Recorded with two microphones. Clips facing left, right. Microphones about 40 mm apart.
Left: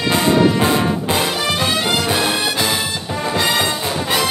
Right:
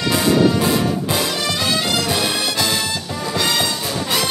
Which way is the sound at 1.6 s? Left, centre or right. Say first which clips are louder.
Left 2 dB; left.